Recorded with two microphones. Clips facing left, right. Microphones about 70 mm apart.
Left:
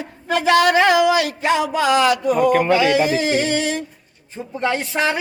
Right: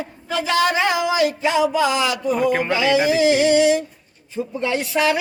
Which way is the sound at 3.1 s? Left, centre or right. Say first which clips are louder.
Right 3 dB; left.